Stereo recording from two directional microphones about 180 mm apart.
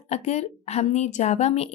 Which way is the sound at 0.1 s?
40° left (ahead or behind).